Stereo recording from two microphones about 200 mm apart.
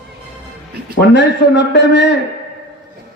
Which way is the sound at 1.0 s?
60° left (ahead or behind).